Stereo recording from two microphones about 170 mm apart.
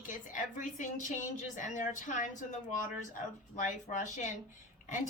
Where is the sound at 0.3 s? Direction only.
50° left (ahead or behind).